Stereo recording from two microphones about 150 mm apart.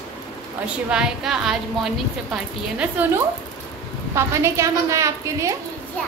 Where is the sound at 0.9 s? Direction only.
5° right (ahead or behind).